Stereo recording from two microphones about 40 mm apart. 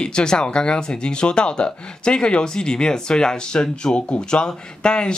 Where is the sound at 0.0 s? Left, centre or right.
Left.